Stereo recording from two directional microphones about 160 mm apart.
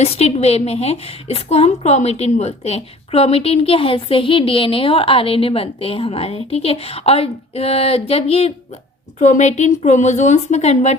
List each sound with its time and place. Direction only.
0.0 s a woman's voice: 40° left (ahead or behind)